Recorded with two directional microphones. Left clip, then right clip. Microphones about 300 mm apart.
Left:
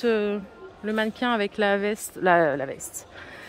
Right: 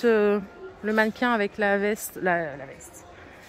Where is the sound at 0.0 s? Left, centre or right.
Centre.